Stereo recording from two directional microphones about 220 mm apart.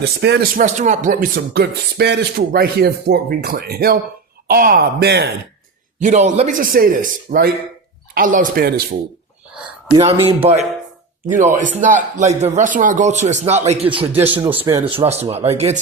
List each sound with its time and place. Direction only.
0.0 s speech: 50° right (ahead or behind)
0.6 s speech: 35° right (ahead or behind)
6.0 s speech: 35° right (ahead or behind)
10.2 s speech: 30° right (ahead or behind)
14.1 s speech: 10° right (ahead or behind)
14.7 s speech: 20° right (ahead or behind)